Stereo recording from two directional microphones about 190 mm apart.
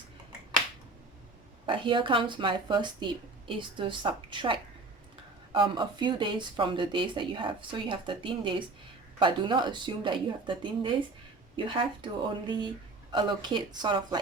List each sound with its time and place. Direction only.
1.6 s speech: 25° right (ahead or behind)